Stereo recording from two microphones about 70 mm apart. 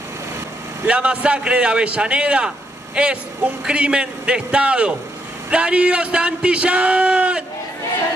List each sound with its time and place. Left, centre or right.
0.8 s a man's voice: centre